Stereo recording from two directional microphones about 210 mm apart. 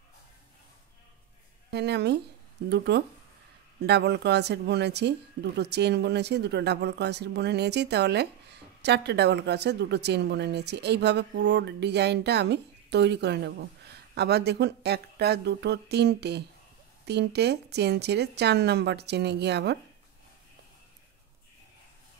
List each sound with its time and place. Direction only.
1.7 s speech: 55° right (ahead or behind)